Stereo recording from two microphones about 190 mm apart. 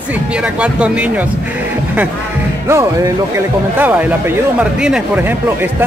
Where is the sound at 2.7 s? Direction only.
15° right (ahead or behind).